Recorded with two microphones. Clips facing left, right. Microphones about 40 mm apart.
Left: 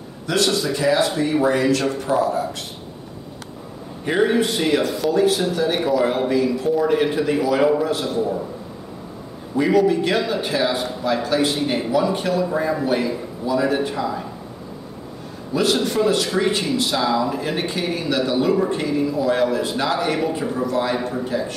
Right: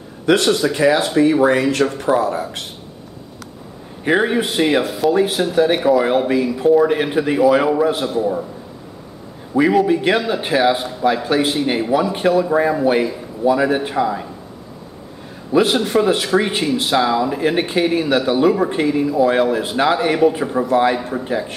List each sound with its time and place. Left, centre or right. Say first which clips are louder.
0.3 s speech: right 5 dB; right
4.1 s a man's voice: right 2 dB; centre
8.0 s a man's voice: right 3 dB; centre
9.6 s a man's voice: right 3 dB; centre
9.8 s speech: right 3 dB; right
15.5 s speech: right 4 dB; right